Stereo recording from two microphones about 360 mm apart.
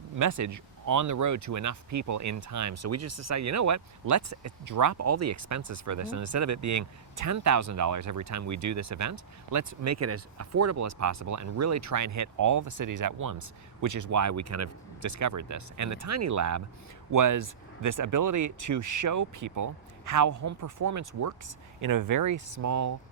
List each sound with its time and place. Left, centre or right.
0.2 s speech: right